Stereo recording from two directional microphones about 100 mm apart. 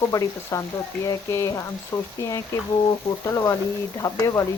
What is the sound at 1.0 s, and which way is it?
Frying, 30° left (ahead or behind).